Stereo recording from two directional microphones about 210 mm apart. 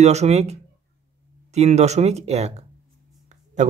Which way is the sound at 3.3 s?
35° right (ahead or behind).